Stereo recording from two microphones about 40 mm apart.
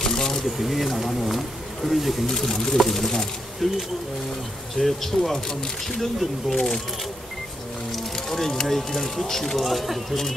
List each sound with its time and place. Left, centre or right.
0.0 s a sound: centre
0.6 s speech: centre
2.2 s speech: centre
5.5 s speech: centre
7.9 s speech: centre
9.7 s speech: centre